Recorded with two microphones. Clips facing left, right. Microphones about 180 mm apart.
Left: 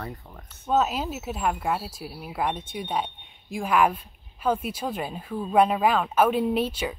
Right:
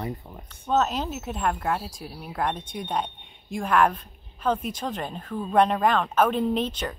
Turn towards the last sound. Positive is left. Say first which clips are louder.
# left 1 dB
turn(degrees=10)  # may be behind; listen again after turning